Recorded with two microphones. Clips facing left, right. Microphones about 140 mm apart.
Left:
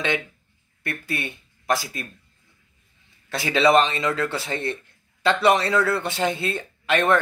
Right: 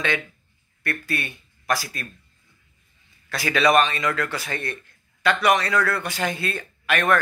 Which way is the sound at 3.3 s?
25° left (ahead or behind).